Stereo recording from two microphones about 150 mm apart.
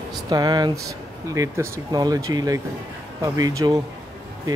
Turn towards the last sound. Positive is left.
turn(degrees=-25)  # may be behind; listen again after turning